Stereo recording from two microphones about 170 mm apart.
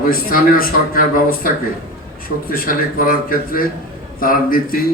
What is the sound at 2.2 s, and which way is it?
A man's voice, 60° left (ahead or behind).